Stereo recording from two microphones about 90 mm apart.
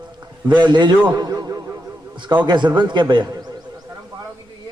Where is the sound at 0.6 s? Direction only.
55° right (ahead or behind).